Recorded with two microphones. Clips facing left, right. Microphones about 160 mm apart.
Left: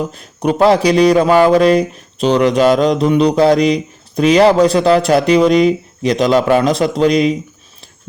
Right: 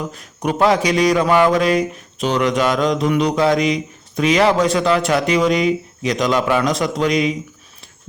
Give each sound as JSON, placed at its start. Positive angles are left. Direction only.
{"t": 0.1, "sound": "speech", "side_deg": 30}